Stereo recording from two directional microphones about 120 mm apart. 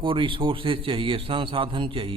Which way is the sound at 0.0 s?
45° right (ahead or behind).